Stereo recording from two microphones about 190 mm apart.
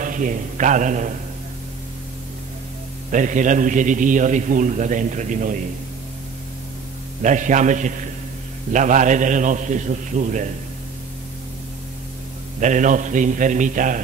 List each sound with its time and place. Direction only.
0.0 s a man's voice: 45° right (ahead or behind)
3.1 s a man's voice: 40° right (ahead or behind)
7.2 s a man's voice: 40° right (ahead or behind)
12.5 s a man's voice: 40° right (ahead or behind)